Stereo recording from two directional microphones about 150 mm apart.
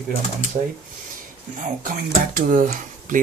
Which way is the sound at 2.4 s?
65° right (ahead or behind).